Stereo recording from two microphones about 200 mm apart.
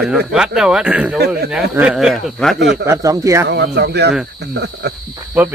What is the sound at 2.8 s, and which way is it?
Speech, 15° right (ahead or behind).